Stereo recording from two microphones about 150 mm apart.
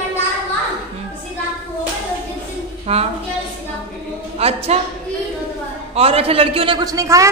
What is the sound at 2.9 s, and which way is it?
Speech, 45° right (ahead or behind).